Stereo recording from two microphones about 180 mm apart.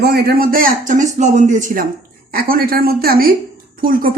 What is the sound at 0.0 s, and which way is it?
A man's voice, 60° right (ahead or behind).